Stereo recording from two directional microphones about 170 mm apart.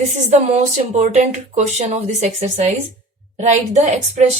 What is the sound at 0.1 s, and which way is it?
Speech, 45° right (ahead or behind).